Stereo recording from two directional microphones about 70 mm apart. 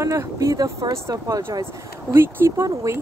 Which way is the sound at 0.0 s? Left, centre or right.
Right.